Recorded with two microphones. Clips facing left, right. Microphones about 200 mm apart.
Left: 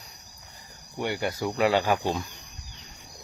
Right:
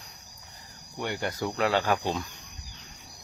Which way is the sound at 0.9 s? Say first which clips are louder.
Left 3 dB; 10° left (ahead or behind).